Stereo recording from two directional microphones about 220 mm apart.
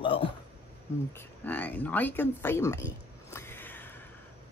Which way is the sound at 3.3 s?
10° left (ahead or behind).